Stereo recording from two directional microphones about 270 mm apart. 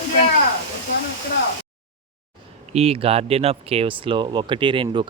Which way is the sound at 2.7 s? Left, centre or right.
Right.